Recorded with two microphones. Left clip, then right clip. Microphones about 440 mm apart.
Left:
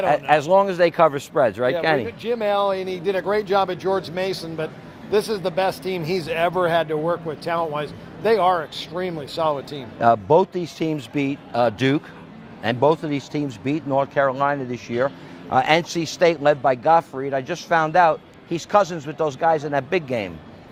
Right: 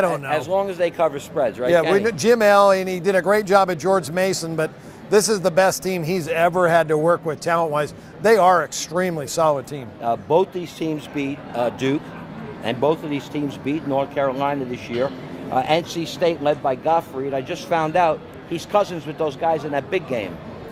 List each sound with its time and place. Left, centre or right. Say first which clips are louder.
0.1 s a man's voice: left 5 dB; left
2.0 s a man's voice: right 7 dB; right
10.0 s a man's voice: left 3 dB; left